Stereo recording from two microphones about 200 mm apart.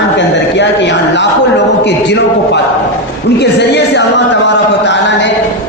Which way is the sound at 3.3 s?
60° left (ahead or behind).